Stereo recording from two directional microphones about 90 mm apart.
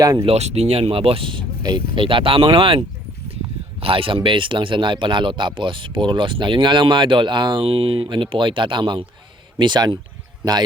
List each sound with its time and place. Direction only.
0.0 s speech: 45° right (ahead or behind)
0.3 s speech: 90° right; by 1.5 s 75° right (ahead or behind)
1.6 s speech: 60° right (ahead or behind); by 2.4 s 80° right
2.4 s speech: 65° right (ahead or behind)
3.8 s speech: 85° right
8.0 s speech: 65° right (ahead or behind)